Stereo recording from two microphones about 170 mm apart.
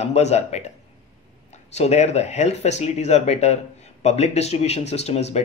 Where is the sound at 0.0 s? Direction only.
40° left (ahead or behind).